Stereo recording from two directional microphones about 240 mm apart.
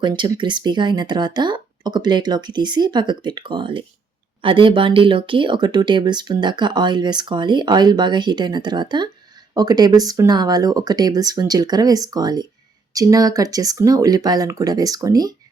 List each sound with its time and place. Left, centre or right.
0.0 s speech: centre